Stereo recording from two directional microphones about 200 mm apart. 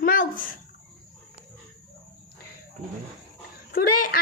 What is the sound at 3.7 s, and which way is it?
Speech, 50° left (ahead or behind).